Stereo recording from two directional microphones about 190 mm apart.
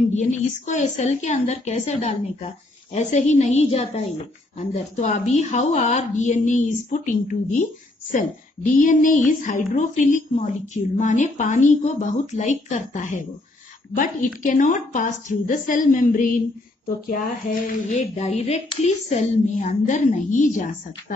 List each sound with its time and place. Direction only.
0.1 s a woman's voice: 40° left (ahead or behind)
8.7 s a woman's voice: 45° left (ahead or behind)
17.8 s a woman's voice: 40° left (ahead or behind)